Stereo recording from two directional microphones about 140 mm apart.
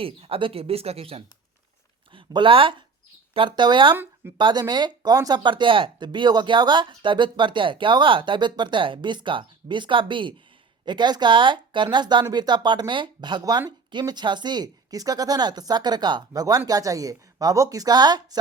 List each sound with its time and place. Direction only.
0.0 s speech: 40° right (ahead or behind)
3.9 s speech: 15° right (ahead or behind)
4.4 s speech: 30° right (ahead or behind)